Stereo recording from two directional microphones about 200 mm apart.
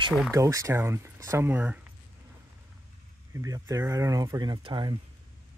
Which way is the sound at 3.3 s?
15° right (ahead or behind).